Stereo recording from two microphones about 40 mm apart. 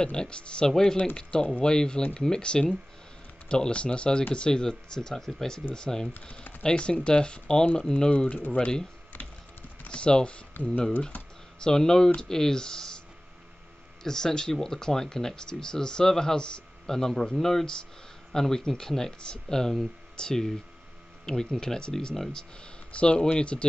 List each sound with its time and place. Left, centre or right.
0.0 s speech: left
9.8 s speech: left
10.5 s a sound: left
11.6 s speech: centre
14.0 s speech: centre
22.1 s speech: centre
22.9 s speech: left